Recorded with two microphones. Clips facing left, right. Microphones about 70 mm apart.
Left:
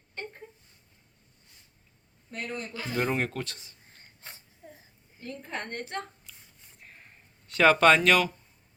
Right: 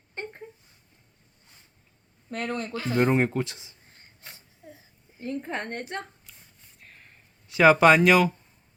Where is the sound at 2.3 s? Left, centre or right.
Right.